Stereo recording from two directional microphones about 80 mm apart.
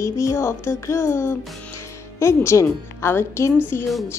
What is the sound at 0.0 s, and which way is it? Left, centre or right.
Speech, left.